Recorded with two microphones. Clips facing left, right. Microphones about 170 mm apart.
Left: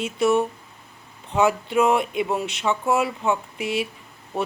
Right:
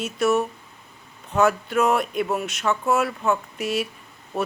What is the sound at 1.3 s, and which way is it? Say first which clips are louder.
Speech: even; 15° left (ahead or behind).